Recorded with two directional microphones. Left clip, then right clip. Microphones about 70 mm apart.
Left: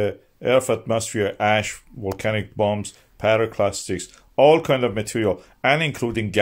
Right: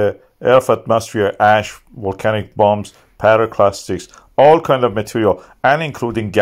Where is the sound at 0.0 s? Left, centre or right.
Right.